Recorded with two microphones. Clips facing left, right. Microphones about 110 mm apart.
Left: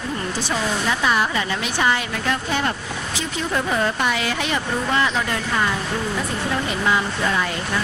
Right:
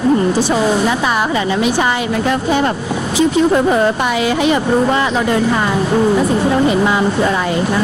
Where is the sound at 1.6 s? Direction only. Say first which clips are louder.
Right 6 dB; 15° right (ahead or behind).